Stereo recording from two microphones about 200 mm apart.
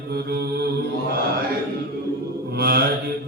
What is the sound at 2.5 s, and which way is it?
Mantra, 50° right (ahead or behind).